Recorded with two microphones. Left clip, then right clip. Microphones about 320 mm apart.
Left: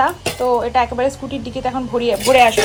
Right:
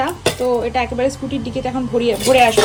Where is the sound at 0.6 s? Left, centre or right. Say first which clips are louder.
Left 2 dB; centre.